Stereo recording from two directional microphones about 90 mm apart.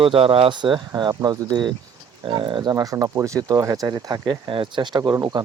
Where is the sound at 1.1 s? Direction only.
45° right (ahead or behind).